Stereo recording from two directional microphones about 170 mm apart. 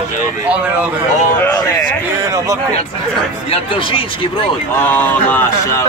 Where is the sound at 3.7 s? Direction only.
30° left (ahead or behind).